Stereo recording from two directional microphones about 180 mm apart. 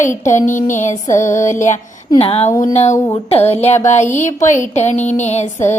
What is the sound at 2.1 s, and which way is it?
Speech, 35° left (ahead or behind).